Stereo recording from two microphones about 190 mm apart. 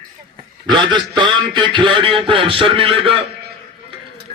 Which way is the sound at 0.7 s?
25° right (ahead or behind).